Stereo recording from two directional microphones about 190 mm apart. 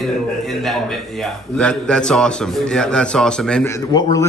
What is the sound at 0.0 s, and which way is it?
A man's voice, centre (ahead or behind).